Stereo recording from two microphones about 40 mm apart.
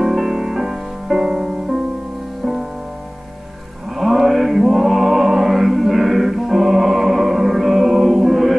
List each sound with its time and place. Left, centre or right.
0.0 s music: centre
3.9 s mantra: centre